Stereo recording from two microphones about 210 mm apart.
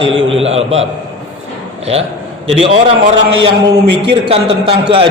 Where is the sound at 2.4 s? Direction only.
30° right (ahead or behind).